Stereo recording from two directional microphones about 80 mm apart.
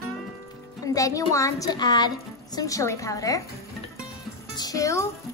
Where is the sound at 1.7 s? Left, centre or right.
Left.